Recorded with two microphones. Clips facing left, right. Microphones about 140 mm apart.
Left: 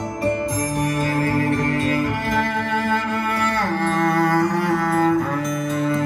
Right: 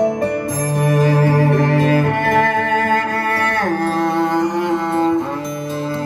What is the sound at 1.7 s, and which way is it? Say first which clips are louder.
Music: right 6 dB; 60° right (ahead or behind).